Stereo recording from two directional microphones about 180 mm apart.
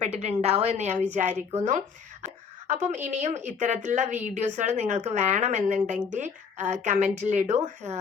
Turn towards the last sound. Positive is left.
turn(degrees=-40)  # may be behind; listen again after turning